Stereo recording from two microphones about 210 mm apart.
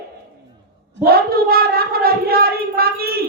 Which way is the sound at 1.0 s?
45° right (ahead or behind).